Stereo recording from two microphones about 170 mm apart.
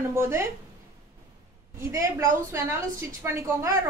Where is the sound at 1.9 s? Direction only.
15° right (ahead or behind).